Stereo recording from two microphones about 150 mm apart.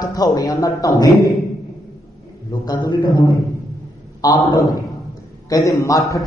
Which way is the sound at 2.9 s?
30° left (ahead or behind).